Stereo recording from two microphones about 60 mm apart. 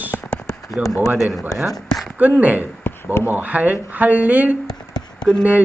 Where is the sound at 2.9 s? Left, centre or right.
Left.